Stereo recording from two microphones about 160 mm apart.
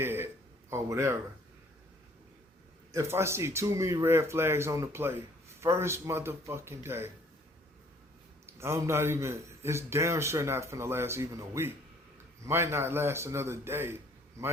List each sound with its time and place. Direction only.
0.0 s speech: 15° right (ahead or behind)
2.9 s speech: 15° right (ahead or behind)
8.4 s speech: 15° right (ahead or behind)